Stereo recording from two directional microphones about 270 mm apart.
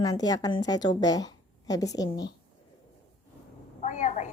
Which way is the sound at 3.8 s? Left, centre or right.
Left.